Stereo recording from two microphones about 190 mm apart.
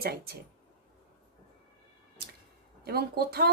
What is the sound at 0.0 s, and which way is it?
Speech, 55° right (ahead or behind).